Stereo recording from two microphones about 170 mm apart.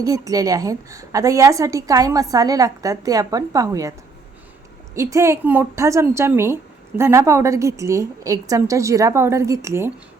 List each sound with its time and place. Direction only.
0.0 s a woman's voice: 20° right (ahead or behind)
4.9 s a woman's voice: 20° right (ahead or behind)